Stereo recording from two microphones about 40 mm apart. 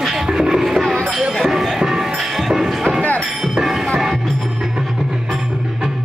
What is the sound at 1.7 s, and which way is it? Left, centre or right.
Music, centre.